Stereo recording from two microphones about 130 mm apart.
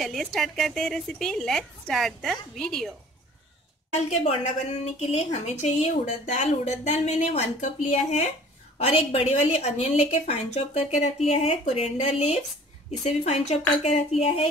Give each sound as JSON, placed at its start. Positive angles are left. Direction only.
{"t": 0.0, "sound": "speech", "side_deg": 0}
{"t": 5.0, "sound": "speech", "side_deg": 55}
{"t": 8.7, "sound": "a woman's voice", "side_deg": 50}